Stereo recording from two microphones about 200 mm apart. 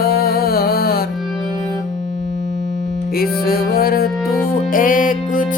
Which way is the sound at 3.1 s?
50° left (ahead or behind).